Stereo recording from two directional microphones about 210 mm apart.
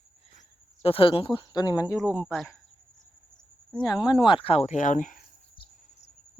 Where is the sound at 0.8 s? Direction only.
25° left (ahead or behind).